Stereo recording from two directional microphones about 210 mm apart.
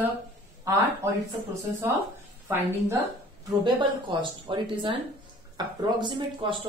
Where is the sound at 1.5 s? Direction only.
15° right (ahead or behind).